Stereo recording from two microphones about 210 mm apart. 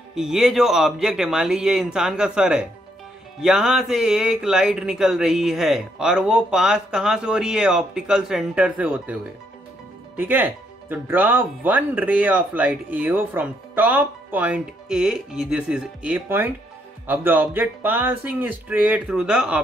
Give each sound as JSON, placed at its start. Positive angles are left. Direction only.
{"t": 0.1, "sound": "speech", "side_deg": -5}